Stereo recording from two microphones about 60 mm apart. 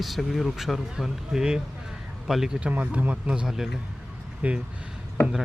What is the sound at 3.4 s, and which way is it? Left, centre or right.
Speech, centre.